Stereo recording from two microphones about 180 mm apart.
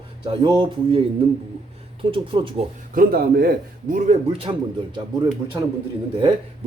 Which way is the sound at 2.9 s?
55° right (ahead or behind).